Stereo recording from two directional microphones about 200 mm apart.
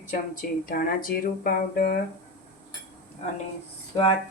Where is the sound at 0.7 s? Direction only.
45° left (ahead or behind).